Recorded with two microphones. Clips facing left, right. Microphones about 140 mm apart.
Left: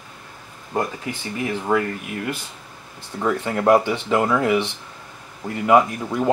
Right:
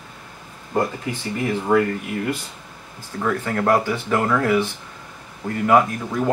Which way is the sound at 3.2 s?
15° left (ahead or behind).